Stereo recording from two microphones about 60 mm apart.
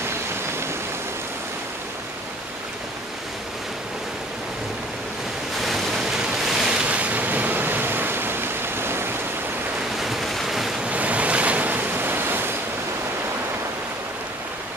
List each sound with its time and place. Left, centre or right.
5.6 s waves: centre
6.0 s waves: centre
6.7 s waves: right
9.9 s waves: centre
10.9 s waves: right